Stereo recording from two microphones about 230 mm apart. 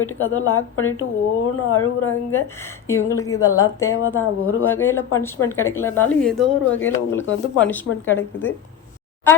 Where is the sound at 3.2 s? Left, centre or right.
Centre.